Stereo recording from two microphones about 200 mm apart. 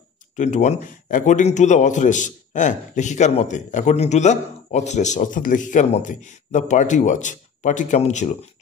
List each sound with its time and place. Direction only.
0.4 s a man's voice: 35° left (ahead or behind)